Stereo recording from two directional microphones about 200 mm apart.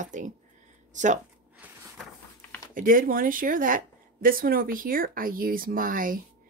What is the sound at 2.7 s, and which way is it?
A woman's voice, 45° right (ahead or behind).